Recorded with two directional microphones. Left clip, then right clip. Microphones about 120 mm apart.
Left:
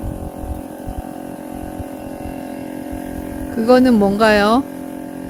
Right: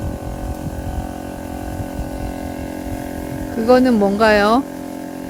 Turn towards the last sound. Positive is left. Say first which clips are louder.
# even
turn(degrees=30)  # may be behind; listen again after turning